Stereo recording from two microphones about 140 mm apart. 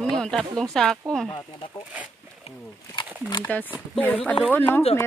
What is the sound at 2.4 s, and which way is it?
Speech, 35° left (ahead or behind).